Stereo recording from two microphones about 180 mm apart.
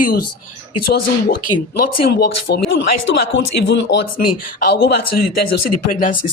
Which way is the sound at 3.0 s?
80° left.